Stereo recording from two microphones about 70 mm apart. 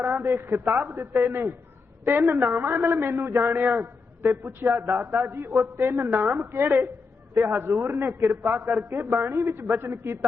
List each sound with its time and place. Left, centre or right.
0.0 s a man's voice: right
8.5 s a man's voice: right